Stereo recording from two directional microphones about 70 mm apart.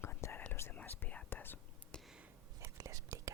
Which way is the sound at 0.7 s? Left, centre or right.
Left.